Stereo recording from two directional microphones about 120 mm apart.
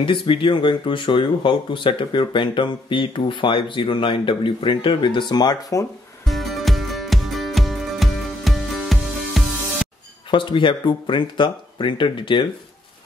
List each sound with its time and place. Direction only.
0.0 s speech: 45° left (ahead or behind)
6.2 s music: centre (ahead or behind)
10.3 s speech: 45° left (ahead or behind)